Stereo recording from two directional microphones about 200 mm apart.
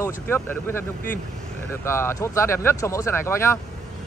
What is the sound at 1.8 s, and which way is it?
Speech, 15° left (ahead or behind).